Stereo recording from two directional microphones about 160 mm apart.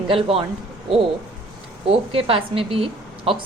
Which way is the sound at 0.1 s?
35° right (ahead or behind).